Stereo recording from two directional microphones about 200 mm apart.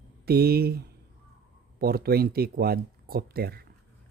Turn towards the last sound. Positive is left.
turn(degrees=-50)  # may be behind; listen again after turning